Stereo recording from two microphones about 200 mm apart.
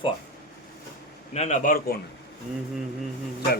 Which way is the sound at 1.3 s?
35° left (ahead or behind).